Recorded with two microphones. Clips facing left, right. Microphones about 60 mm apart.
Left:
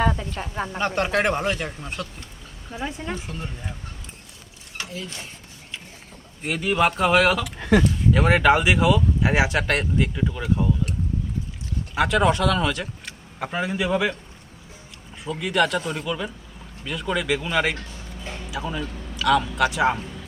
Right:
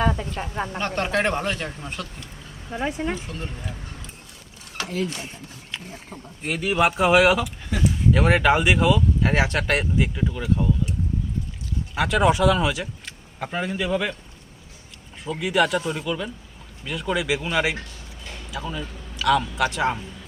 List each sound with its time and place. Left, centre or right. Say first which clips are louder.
0.0 s speech: even; centre
2.8 s speech: right 4 dB; centre
3.2 s speech: even; centre
4.9 s speech: right 11 dB; right
5.7 s a sound: right 3 dB; right
6.4 s speech: even; centre
7.4 s speech: left 8 dB; left
7.9 s speech: even; centre
11.9 s speech: even; centre
15.3 s speech: right 1 dB; centre
18.5 s speech: left 1 dB; centre
18.8 s speech: left 2 dB; centre